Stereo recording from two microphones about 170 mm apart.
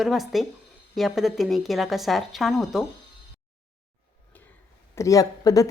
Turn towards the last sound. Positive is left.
turn(degrees=20)  # may be behind; listen again after turning